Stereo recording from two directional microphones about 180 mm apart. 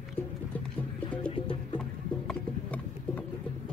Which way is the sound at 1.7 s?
5° left (ahead or behind).